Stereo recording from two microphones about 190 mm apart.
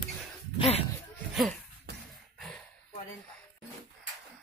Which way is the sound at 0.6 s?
30° left (ahead or behind).